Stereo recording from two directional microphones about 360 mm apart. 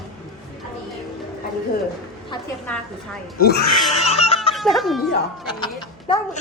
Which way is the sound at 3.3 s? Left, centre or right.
Left.